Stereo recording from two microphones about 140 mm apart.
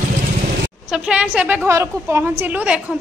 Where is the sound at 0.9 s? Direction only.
5° right (ahead or behind).